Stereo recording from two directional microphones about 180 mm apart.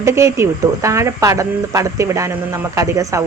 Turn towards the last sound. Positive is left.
turn(degrees=-20)  # may be behind; listen again after turning